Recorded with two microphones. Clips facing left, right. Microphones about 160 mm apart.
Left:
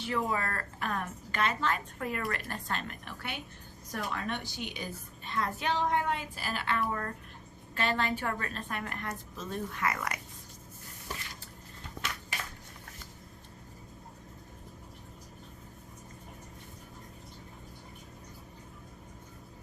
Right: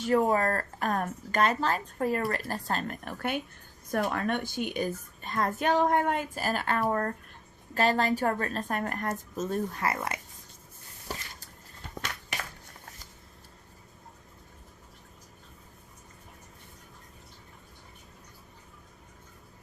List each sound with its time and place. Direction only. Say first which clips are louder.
0.0 s a woman's voice: right 8 dB; 45° right (ahead or behind); by 10.2 s 30° right (ahead or behind)